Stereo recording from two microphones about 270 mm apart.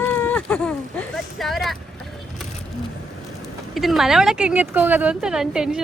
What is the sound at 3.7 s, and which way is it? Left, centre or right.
Speech, centre.